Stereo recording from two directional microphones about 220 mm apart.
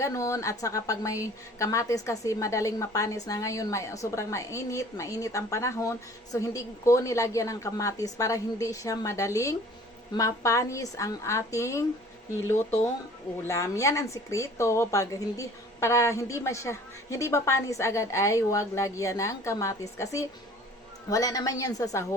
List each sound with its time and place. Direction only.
0.0 s a woman's voice: 15° left (ahead or behind)
13.5 s a woman's voice: 15° left (ahead or behind)